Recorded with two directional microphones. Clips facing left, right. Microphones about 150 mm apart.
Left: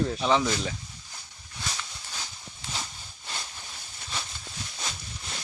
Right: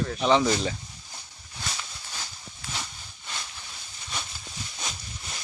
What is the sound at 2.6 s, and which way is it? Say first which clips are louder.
Horse: even; 20° left (ahead or behind).